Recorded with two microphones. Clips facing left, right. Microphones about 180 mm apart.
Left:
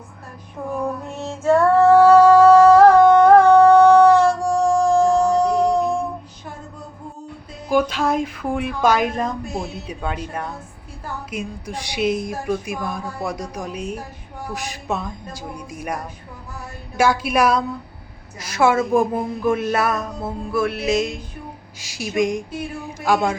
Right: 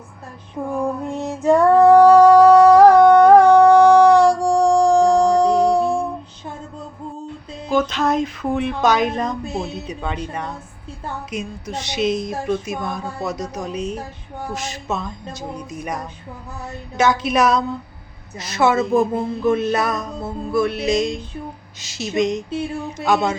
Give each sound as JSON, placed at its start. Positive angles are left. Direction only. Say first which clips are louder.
{"t": 0.8, "sound": "female singing", "louder": "right 4 dB", "side_deg": -15}
{"t": 5.5, "sound": "music", "louder": "right 2 dB", "side_deg": -10}
{"t": 7.7, "sound": "a sound", "louder": "even", "side_deg": 10}
{"t": 8.8, "sound": "music", "louder": "left 1 dB", "side_deg": 5}
{"t": 9.5, "sound": "speech", "louder": "right 2 dB", "side_deg": 5}
{"t": 11.3, "sound": "music", "louder": "even", "side_deg": 10}
{"t": 17.0, "sound": "music", "louder": "right 1 dB", "side_deg": 10}
{"t": 22.4, "sound": "mantra", "louder": "right 4 dB", "side_deg": -25}
{"t": 23.0, "sound": "music", "louder": "even", "side_deg": 10}